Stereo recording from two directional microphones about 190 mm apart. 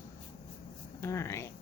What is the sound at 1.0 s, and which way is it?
Speech, 15° left (ahead or behind).